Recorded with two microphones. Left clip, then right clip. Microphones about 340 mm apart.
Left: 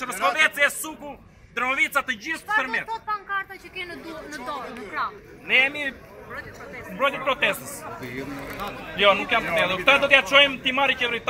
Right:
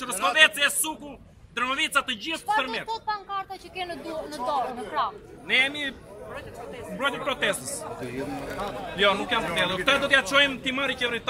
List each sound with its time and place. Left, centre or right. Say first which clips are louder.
0.0 s a sound: right 1 dB; centre
1.5 s a man's voice: left 2 dB; centre
3.7 s a woman's voice: right 3 dB; centre
5.5 s a man's voice: left 3 dB; centre
7.0 s a man's voice: left 4 dB; centre
8.9 s a man's voice: left 4 dB; centre